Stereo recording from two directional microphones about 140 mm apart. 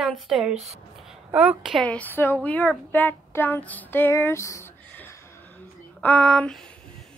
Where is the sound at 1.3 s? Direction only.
10° right (ahead or behind).